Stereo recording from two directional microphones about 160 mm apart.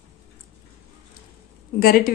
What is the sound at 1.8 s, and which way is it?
Speech, 65° left (ahead or behind).